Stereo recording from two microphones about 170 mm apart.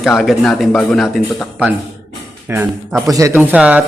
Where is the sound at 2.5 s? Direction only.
15° right (ahead or behind).